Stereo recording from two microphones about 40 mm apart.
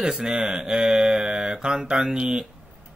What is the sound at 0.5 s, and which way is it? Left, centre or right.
Mantra, centre.